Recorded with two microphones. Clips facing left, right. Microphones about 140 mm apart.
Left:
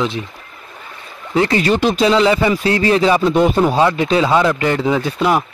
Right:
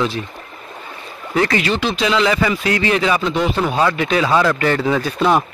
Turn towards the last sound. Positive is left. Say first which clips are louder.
# even
turn(degrees=15)  # may be behind; listen again after turning